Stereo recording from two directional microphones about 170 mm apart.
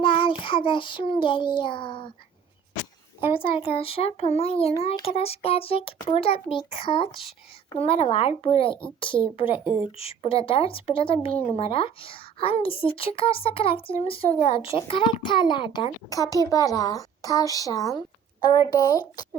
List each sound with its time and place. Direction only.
0.0 s a child's voice: 30° left (ahead or behind)
3.3 s a woman's voice: 30° left (ahead or behind)